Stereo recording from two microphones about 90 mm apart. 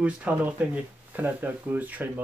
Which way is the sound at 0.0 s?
15° right (ahead or behind).